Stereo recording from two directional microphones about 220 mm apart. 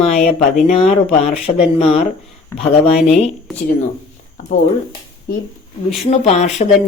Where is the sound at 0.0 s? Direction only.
30° left (ahead or behind).